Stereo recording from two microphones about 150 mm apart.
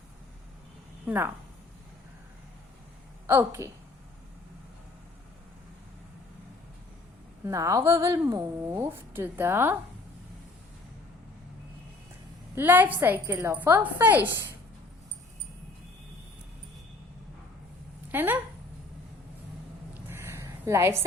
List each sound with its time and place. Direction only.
1.0 s a woman's voice: 15° right (ahead or behind)
3.2 s a woman's voice: 20° right (ahead or behind)
7.4 s a woman's voice: 20° right (ahead or behind)
12.5 s a woman's voice: 15° right (ahead or behind)
18.1 s speech: 15° right (ahead or behind)
19.9 s a sound: 15° right (ahead or behind)